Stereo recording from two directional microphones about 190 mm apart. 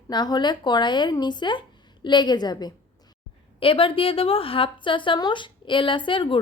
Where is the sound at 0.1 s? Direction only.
20° left (ahead or behind).